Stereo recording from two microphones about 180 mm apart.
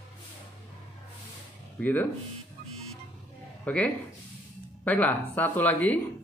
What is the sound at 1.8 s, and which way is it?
Speech, 10° left (ahead or behind).